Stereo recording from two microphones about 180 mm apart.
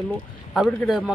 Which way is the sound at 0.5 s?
Centre (ahead or behind).